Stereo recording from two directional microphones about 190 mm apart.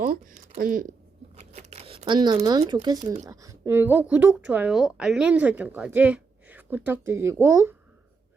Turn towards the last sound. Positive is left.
turn(degrees=-15)  # may be behind; listen again after turning